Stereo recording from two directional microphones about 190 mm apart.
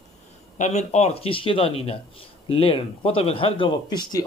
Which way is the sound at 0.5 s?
35° left (ahead or behind).